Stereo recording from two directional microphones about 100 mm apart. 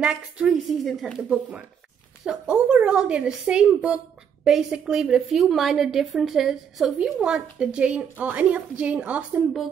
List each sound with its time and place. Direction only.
0.0 s a woman's voice: 10° right (ahead or behind)
2.2 s a woman's voice: 10° right (ahead or behind)